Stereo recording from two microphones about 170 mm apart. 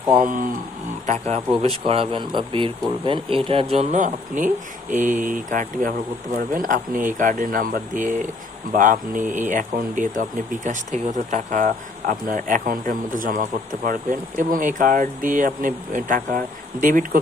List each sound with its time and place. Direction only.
0.2 s speech: 50° right (ahead or behind)
1.0 s speech: 40° right (ahead or behind)